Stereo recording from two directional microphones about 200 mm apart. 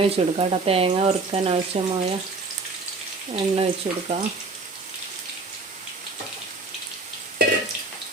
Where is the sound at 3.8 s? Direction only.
30° right (ahead or behind).